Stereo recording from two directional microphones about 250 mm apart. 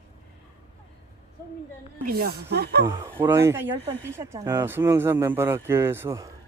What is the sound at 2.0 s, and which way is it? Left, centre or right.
Speech, right.